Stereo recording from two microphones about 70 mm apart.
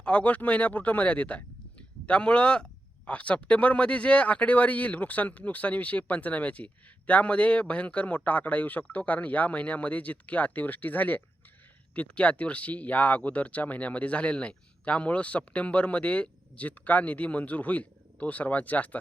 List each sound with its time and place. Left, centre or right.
0.0 s speech: centre